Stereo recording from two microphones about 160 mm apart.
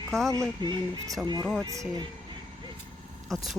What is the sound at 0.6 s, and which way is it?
Speech, 30° right (ahead or behind).